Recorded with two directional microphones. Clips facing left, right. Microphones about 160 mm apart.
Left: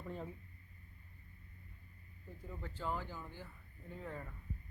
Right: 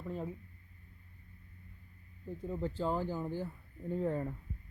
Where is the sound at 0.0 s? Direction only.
5° right (ahead or behind).